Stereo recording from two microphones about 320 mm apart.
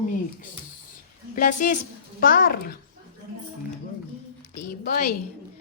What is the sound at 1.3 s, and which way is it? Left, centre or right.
A woman's voice, left.